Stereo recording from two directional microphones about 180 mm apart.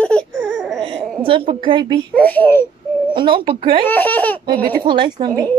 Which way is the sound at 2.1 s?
10° left (ahead or behind).